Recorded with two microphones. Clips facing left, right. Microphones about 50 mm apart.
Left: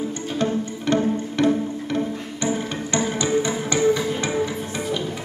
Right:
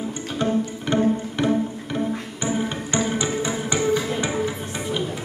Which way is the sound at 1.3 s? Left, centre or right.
Centre.